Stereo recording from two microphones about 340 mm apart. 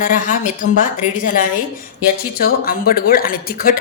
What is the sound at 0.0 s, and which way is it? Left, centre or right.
A woman's voice, left.